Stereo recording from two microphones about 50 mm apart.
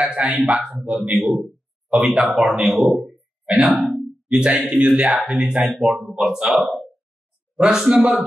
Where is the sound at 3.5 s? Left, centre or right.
Centre.